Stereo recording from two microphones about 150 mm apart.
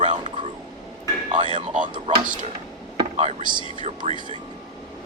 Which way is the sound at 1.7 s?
55° right (ahead or behind).